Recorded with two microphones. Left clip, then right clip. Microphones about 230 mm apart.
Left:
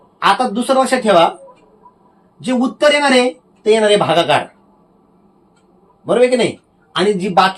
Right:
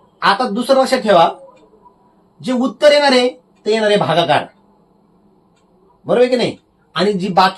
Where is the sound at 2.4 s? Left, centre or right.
Centre.